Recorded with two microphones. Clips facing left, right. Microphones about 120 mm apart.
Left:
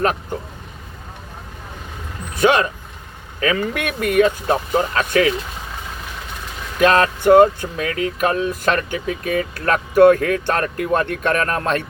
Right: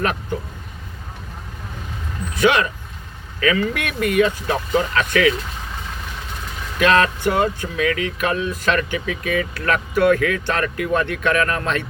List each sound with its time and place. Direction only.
2.4 s speech: 40° left (ahead or behind)
6.7 s speech: 40° left (ahead or behind)